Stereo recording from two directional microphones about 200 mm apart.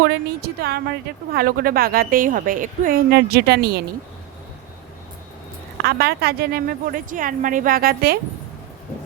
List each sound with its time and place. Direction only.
0.4 s a woman's voice: 55° right (ahead or behind)
5.7 s a woman's voice: 55° right (ahead or behind)